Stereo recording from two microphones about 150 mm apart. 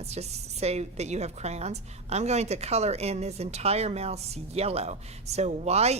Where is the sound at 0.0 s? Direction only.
45° right (ahead or behind).